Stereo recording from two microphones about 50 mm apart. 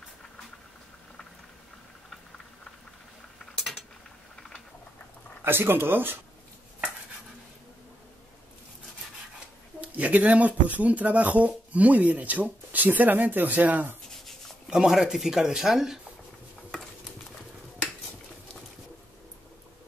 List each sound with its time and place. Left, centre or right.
5.4 s speech: right
9.8 s speech: right
14.1 s a sound: centre
14.8 s speech: centre